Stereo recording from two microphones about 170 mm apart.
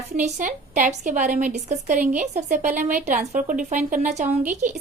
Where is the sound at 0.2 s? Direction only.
45° right (ahead or behind).